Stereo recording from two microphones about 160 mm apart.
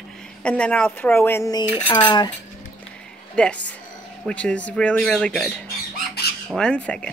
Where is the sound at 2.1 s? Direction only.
25° left (ahead or behind).